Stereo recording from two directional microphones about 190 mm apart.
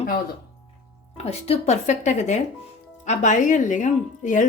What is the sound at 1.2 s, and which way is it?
Speech, 35° left (ahead or behind).